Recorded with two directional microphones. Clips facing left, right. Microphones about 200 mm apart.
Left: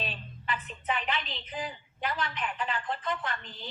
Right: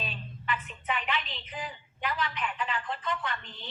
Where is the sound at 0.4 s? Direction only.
35° left (ahead or behind).